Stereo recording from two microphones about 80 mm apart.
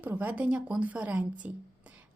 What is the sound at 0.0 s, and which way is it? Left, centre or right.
A woman's voice, right.